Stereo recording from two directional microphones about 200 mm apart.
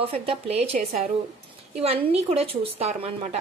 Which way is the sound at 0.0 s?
30° right (ahead or behind).